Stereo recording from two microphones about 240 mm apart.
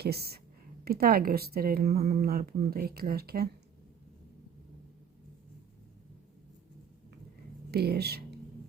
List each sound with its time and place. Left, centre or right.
0.0 s a woman's voice: right
7.7 s speech: right